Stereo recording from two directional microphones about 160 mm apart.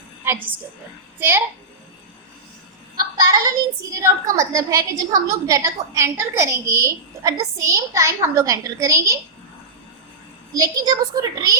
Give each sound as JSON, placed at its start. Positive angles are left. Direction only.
{"t": 1.2, "sound": "a child's voice", "side_deg": -10}
{"t": 3.2, "sound": "a woman's voice", "side_deg": -20}
{"t": 10.6, "sound": "a woman's voice", "side_deg": -25}